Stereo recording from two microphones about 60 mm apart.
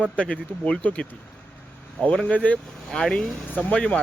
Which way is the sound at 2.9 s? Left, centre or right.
Centre.